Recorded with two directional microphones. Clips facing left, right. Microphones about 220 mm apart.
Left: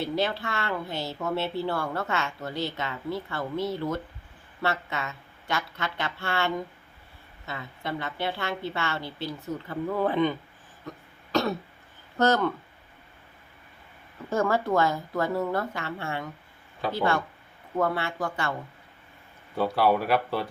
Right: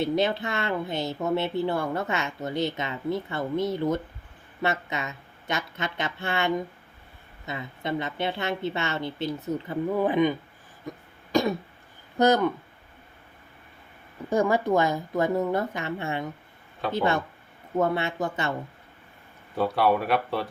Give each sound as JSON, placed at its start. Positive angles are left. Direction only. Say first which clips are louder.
{"t": 0.0, "sound": "speech", "louder": "right 3 dB", "side_deg": -20}
{"t": 10.8, "sound": "throat clearing", "louder": "right 3 dB", "side_deg": -15}
{"t": 12.1, "sound": "speech", "louder": "right 2 dB", "side_deg": -15}
{"t": 14.3, "sound": "speech", "louder": "right 2 dB", "side_deg": -15}
{"t": 19.5, "sound": "speech", "louder": "even", "side_deg": 0}